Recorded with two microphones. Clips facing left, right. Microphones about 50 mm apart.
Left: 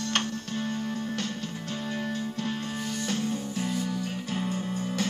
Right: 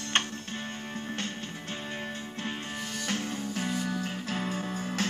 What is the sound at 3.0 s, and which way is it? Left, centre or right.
Music, right.